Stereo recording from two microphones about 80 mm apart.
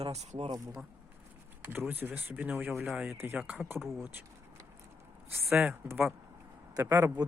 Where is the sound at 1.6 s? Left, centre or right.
Right.